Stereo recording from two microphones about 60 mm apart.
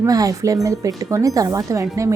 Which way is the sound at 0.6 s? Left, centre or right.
Right.